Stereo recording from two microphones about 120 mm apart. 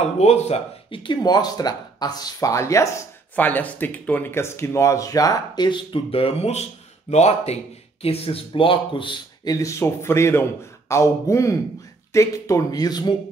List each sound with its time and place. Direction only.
0.2 s speech: 65° left (ahead or behind); by 2.9 s 25° left (ahead or behind)
3.3 s speech: 15° left (ahead or behind); by 7.5 s 65° left (ahead or behind)
8.0 s speech: 55° left (ahead or behind); by 13.1 s 35° left (ahead or behind)